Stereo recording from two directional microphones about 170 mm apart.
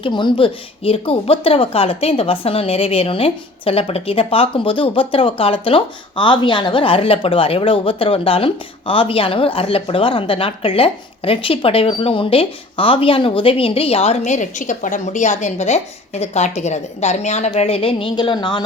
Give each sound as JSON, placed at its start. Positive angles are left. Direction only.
{"t": 0.0, "sound": "speech", "side_deg": 25}
{"t": 14.3, "sound": "speech", "side_deg": 45}